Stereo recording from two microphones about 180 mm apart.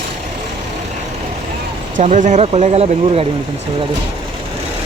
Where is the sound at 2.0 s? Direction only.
45° right (ahead or behind).